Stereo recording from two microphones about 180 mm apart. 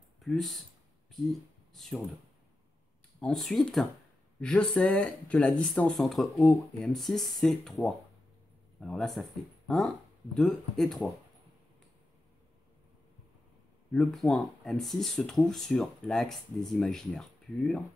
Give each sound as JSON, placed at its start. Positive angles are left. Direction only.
{"t": 0.2, "sound": "speech", "side_deg": 0}
{"t": 3.2, "sound": "speech", "side_deg": 5}
{"t": 13.9, "sound": "speech", "side_deg": 0}